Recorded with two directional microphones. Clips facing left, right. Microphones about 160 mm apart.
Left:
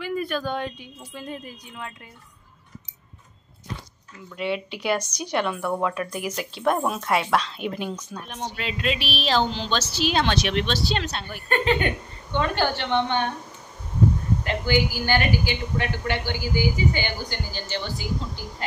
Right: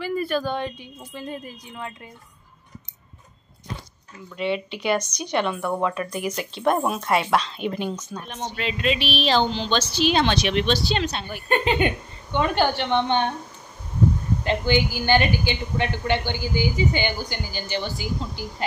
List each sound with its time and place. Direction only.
0.0 s speech: centre (ahead or behind)
4.4 s speech: 5° left (ahead or behind)
11.4 s a woman's voice: 20° right (ahead or behind)
14.4 s a woman's voice: 25° right (ahead or behind)